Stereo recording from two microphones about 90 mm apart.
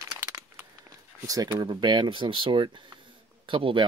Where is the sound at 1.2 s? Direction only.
40° right (ahead or behind).